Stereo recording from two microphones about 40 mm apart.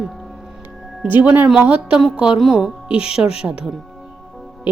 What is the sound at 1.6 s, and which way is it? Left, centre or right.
Speech, right.